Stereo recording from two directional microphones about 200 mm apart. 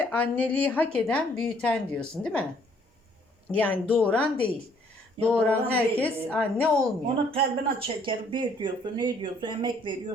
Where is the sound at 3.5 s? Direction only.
10° left (ahead or behind).